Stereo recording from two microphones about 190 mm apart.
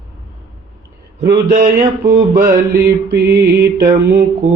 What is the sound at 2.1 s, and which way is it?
Mantra, 55° right (ahead or behind).